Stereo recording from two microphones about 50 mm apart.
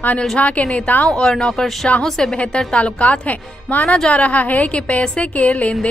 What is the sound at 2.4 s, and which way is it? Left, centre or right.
A woman's voice, left.